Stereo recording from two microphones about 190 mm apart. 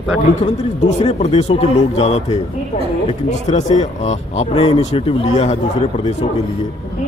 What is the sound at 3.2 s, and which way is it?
Speech, 35° left (ahead or behind).